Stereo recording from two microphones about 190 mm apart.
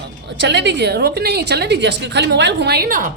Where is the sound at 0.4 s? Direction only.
65° right (ahead or behind).